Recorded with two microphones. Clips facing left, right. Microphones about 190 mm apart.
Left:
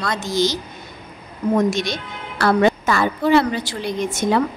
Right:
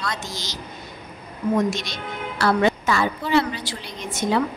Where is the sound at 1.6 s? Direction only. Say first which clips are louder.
Left 5 dB; 50° left (ahead or behind).